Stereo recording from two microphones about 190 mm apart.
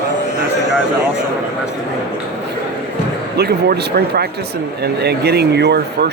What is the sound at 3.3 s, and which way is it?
Speech, 55° right (ahead or behind).